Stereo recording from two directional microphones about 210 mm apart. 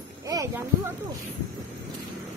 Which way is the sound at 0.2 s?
15° right (ahead or behind).